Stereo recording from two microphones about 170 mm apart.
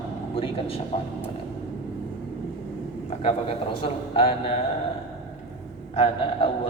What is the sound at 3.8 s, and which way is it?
Speech, 35° left (ahead or behind).